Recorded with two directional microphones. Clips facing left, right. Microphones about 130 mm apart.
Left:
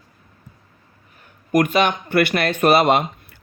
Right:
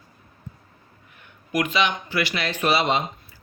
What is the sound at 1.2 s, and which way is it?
A man's voice, 50° left (ahead or behind).